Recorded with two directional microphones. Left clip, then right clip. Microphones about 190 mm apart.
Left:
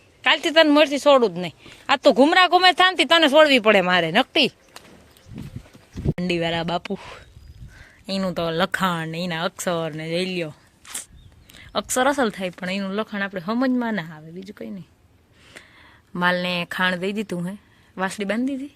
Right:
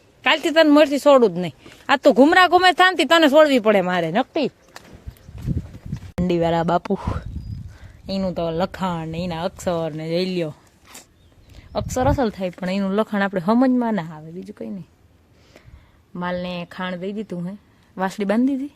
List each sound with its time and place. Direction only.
0.2 s speech: 20° right (ahead or behind); by 4.8 s centre (ahead or behind)
6.2 s speech: 15° right (ahead or behind)
8.0 s speech: centre (ahead or behind)
11.5 s speech: 5° right (ahead or behind); by 13.6 s 25° right (ahead or behind)
13.6 s speech: 10° right (ahead or behind)
16.1 s a woman's voice: 10° left (ahead or behind)
17.9 s speech: 15° right (ahead or behind)